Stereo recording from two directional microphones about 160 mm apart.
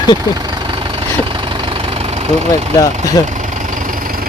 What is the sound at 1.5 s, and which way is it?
Engine, 35° right (ahead or behind).